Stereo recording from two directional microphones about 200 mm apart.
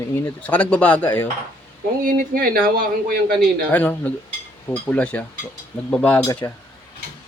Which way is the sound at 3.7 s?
10° left (ahead or behind).